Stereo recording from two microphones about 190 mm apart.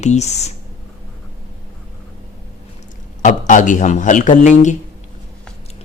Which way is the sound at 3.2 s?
40° left (ahead or behind).